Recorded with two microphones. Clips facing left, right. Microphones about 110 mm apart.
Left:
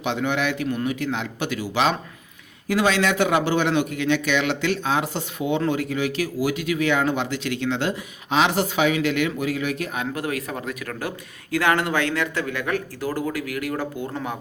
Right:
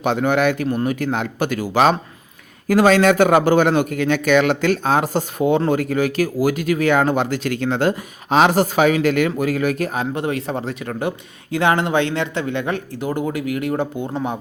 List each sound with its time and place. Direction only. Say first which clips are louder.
0.0 s speech: right 6 dB; 45° right (ahead or behind); by 14.3 s 20° right (ahead or behind)